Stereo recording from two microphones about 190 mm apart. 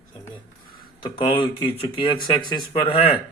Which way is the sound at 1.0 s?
25° left (ahead or behind).